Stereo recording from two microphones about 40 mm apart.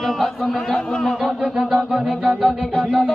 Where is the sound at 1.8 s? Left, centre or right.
Centre.